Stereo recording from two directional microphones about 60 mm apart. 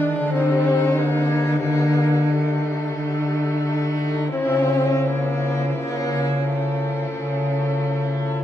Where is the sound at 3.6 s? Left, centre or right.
Left.